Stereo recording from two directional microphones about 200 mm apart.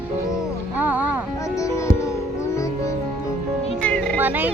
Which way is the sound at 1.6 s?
15° left (ahead or behind).